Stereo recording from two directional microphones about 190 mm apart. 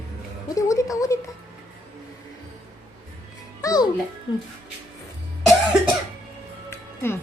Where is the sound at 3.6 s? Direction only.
20° left (ahead or behind).